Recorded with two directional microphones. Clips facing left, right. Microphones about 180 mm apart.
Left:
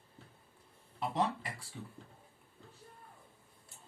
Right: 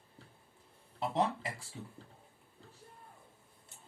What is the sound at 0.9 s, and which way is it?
Speech, 25° right (ahead or behind).